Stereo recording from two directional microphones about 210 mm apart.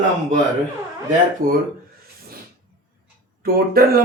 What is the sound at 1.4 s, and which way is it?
Speech, 40° right (ahead or behind).